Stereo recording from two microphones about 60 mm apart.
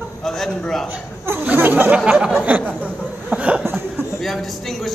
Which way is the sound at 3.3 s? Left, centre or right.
Centre.